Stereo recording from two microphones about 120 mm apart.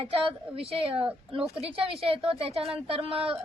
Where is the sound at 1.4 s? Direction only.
5° right (ahead or behind).